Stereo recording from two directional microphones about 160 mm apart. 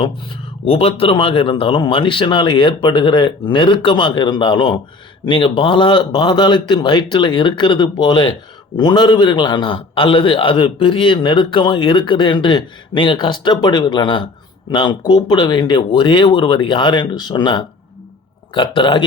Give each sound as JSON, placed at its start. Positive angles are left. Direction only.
{"t": 0.6, "sound": "speech", "side_deg": 35}